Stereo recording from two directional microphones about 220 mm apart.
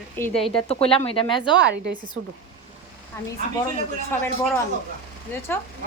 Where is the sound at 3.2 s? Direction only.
10° left (ahead or behind).